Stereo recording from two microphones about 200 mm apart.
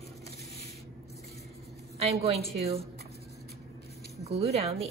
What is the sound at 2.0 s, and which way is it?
Speech, 30° right (ahead or behind).